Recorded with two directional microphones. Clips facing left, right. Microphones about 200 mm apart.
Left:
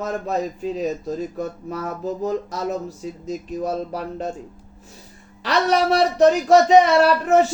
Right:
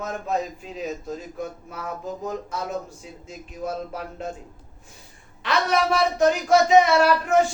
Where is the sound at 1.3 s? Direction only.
35° left (ahead or behind).